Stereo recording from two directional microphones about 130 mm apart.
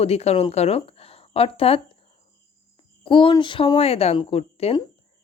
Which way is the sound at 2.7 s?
40° left (ahead or behind).